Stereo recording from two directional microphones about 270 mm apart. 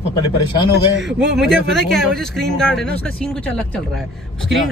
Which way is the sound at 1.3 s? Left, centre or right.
Centre.